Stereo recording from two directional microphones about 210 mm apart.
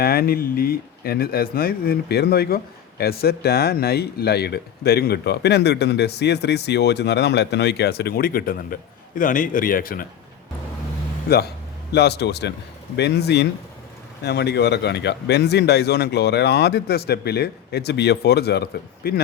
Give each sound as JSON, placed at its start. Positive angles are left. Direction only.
{"t": 0.0, "sound": "speech", "side_deg": 45}
{"t": 11.9, "sound": "speech", "side_deg": 50}